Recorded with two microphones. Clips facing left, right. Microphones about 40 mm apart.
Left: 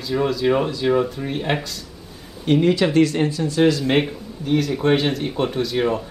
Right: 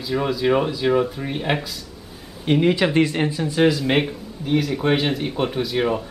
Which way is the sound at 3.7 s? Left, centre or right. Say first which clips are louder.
Left 1 dB; centre.